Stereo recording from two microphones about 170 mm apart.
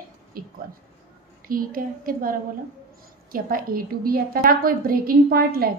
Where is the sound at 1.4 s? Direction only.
55° right (ahead or behind).